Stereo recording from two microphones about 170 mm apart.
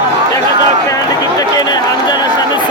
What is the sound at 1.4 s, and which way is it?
Chatter, 25° left (ahead or behind).